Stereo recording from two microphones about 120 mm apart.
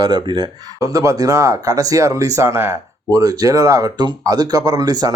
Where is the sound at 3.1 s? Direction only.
30° right (ahead or behind).